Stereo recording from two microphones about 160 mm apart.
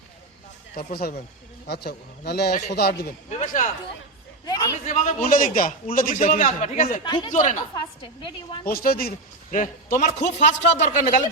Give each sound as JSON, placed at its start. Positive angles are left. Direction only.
{"t": 0.8, "sound": "speech", "side_deg": 70}
{"t": 1.6, "sound": "a man's voice", "side_deg": 90}
{"t": 3.2, "sound": "a man's voice", "side_deg": 50}
{"t": 4.4, "sound": "a sound", "side_deg": 25}
{"t": 4.9, "sound": "a man's voice", "side_deg": 45}
{"t": 7.0, "sound": "a woman's voice", "side_deg": 30}
{"t": 8.6, "sound": "a man's voice", "side_deg": 65}